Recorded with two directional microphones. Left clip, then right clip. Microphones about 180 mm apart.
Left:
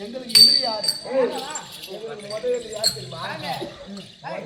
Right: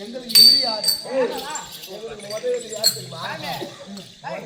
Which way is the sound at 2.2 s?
20° left (ahead or behind).